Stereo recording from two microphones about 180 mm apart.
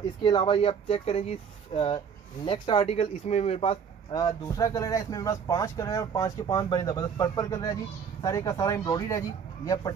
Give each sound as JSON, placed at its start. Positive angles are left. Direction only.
{"t": 0.2, "sound": "speech", "side_deg": 25}
{"t": 2.4, "sound": "speech", "side_deg": 25}
{"t": 4.1, "sound": "speech", "side_deg": 20}